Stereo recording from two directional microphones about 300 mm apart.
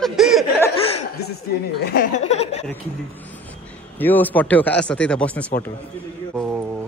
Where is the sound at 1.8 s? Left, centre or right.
Left.